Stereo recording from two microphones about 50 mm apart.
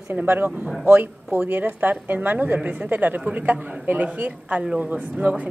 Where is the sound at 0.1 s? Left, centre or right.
Right.